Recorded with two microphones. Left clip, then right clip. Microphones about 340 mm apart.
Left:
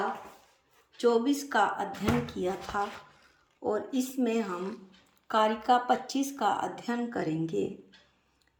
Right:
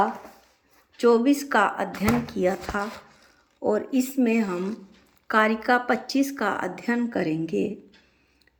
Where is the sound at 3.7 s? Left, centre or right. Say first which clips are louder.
Right 7 dB; centre.